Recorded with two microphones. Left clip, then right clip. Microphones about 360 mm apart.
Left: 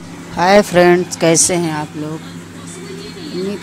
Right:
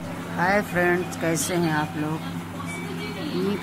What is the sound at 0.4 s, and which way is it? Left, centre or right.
Speech, left.